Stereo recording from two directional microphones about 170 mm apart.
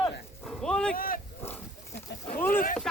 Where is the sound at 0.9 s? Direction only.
55° left (ahead or behind).